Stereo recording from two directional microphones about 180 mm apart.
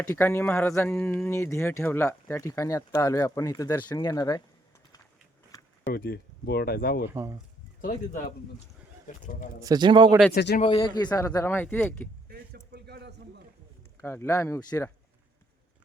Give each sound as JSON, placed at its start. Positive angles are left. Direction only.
{"t": 0.1, "sound": "speech", "side_deg": 10}
{"t": 5.9, "sound": "speech", "side_deg": 55}
{"t": 7.1, "sound": "speech", "side_deg": -15}
{"t": 7.8, "sound": "speech", "side_deg": 45}
{"t": 9.2, "sound": "speech", "side_deg": 45}
{"t": 9.6, "sound": "a man's voice", "side_deg": -20}
{"t": 10.3, "sound": "speech", "side_deg": 60}
{"t": 10.6, "sound": "speech", "side_deg": 25}
{"t": 12.3, "sound": "a sound", "side_deg": -60}
{"t": 14.0, "sound": "speech", "side_deg": 15}